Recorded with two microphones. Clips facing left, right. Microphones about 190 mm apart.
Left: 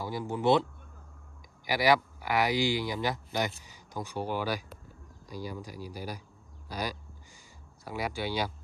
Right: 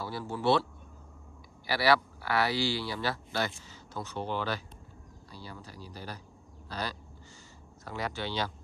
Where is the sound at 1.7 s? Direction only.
15° left (ahead or behind).